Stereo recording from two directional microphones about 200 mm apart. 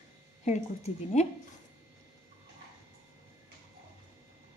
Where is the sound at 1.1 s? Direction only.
35° left (ahead or behind).